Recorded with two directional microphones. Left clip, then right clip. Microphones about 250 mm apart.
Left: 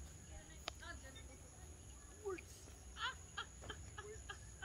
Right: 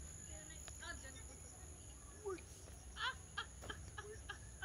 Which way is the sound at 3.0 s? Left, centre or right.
Right.